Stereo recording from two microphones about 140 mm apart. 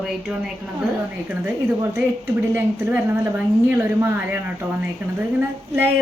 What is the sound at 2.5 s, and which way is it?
A woman's voice, 15° right (ahead or behind).